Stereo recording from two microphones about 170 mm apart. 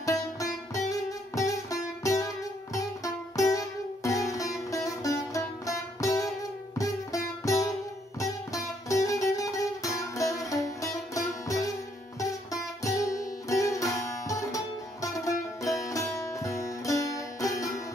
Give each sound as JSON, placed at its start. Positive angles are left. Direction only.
{"t": 0.0, "sound": "music", "side_deg": 20}
{"t": 8.8, "sound": "music", "side_deg": 20}
{"t": 12.8, "sound": "music", "side_deg": 20}